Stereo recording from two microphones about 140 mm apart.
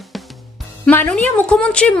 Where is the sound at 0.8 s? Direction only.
10° left (ahead or behind).